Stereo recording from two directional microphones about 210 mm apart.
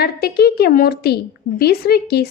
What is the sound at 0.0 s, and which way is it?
Speech, 50° left (ahead or behind).